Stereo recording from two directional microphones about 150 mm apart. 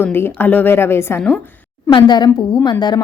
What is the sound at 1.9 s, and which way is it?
Speech, 30° left (ahead or behind).